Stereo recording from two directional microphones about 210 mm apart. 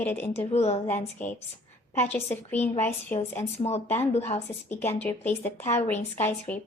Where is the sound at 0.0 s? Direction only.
10° left (ahead or behind).